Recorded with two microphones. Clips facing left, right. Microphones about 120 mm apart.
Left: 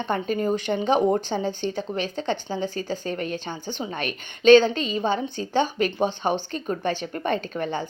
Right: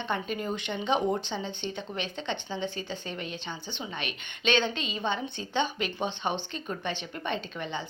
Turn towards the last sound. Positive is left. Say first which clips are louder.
# left 7 dB
turn(degrees=45)  # may be behind; listen again after turning